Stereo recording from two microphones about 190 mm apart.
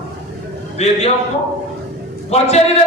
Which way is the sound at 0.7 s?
35° left (ahead or behind).